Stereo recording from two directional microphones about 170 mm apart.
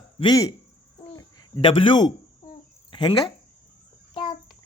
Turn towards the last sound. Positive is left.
turn(degrees=25)  # may be behind; listen again after turning